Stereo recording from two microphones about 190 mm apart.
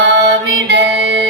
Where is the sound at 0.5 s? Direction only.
70° right (ahead or behind).